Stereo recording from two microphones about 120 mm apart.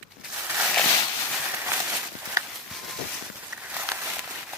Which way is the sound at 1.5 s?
15° right (ahead or behind).